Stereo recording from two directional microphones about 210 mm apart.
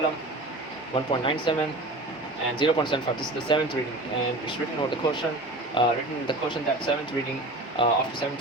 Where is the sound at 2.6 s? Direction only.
20° left (ahead or behind).